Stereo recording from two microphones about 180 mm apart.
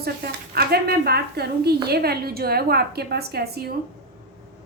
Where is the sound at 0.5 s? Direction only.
60° right (ahead or behind).